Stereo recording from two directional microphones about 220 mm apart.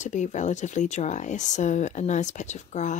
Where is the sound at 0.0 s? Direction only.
35° left (ahead or behind).